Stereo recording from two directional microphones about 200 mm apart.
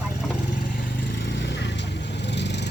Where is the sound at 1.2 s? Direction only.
60° left (ahead or behind).